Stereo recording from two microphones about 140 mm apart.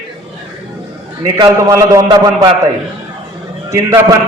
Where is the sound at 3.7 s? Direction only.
20° right (ahead or behind).